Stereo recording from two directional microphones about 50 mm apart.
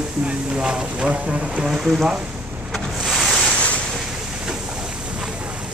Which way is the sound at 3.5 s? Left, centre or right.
Left.